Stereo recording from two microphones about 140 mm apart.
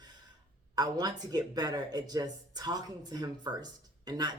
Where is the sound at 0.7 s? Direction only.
30° right (ahead or behind).